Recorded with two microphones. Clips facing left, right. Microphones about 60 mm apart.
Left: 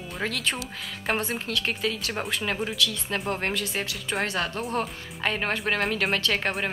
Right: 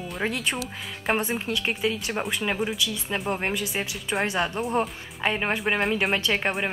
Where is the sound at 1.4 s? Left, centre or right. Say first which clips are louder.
Right 2 dB; centre.